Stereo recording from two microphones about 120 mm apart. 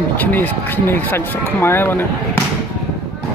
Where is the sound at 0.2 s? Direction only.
15° left (ahead or behind).